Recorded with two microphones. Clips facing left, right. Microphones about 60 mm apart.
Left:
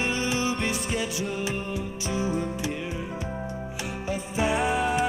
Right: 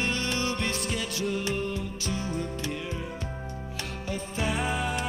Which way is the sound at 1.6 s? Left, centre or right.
Centre.